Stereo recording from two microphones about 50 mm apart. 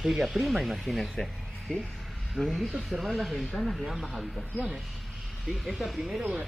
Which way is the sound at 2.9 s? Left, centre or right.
Centre.